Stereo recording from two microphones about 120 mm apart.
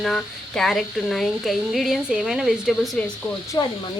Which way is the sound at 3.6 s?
30° left (ahead or behind).